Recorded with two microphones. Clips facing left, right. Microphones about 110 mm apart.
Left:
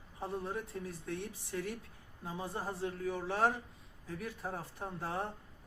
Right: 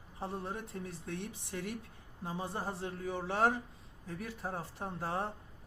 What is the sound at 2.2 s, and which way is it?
A man's voice, 30° right (ahead or behind).